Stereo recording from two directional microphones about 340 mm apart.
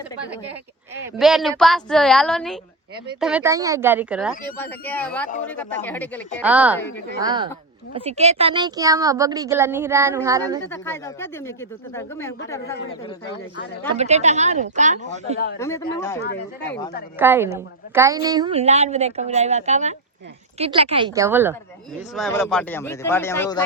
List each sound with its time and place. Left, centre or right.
1.2 s speech: centre
7.2 s a woman's voice: centre
10.7 s speech: centre
13.9 s speech: centre
15.5 s speech: centre
16.3 s speech: left
17.2 s a woman's voice: centre